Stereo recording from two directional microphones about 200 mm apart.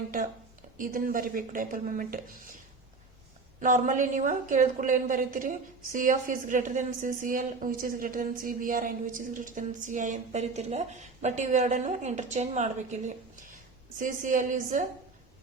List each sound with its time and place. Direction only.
0.8 s speech: 45° right (ahead or behind)
3.6 s a woman's voice: 40° right (ahead or behind)